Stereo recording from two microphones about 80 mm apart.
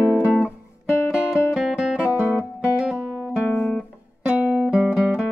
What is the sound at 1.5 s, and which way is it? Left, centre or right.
Music, centre.